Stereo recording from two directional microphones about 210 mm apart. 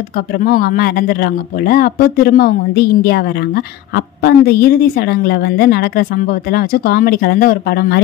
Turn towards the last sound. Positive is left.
turn(degrees=45)  # may be behind; listen again after turning